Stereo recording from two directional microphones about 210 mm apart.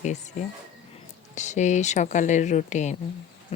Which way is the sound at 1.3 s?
35° left (ahead or behind).